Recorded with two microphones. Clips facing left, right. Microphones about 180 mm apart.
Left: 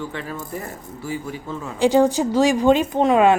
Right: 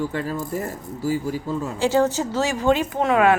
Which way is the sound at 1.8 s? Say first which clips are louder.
Left 4 dB; 15° left (ahead or behind).